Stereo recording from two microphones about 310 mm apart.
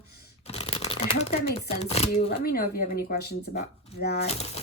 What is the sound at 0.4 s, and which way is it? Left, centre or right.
Shuffling cards, centre.